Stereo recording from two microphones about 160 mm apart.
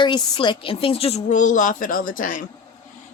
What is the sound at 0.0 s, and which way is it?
A woman's voice, 30° left (ahead or behind).